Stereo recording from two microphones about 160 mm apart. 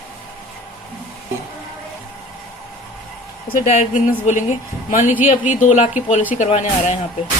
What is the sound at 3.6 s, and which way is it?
A woman's voice, 45° left (ahead or behind).